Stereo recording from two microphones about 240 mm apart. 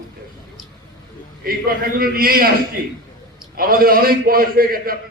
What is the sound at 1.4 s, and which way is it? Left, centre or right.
A man's voice, right.